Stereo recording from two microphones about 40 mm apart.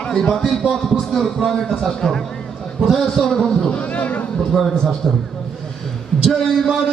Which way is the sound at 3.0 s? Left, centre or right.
Centre.